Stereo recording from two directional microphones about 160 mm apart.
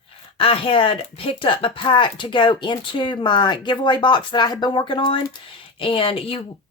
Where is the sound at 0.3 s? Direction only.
35° left (ahead or behind).